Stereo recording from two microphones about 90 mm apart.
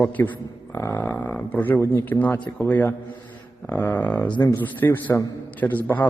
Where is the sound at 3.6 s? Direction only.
20° left (ahead or behind).